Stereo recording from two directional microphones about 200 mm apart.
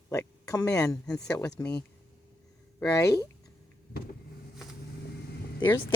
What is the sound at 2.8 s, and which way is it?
Speech, 15° left (ahead or behind).